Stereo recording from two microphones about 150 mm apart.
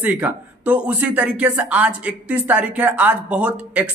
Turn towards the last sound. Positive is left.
turn(degrees=-10)  # may be behind; listen again after turning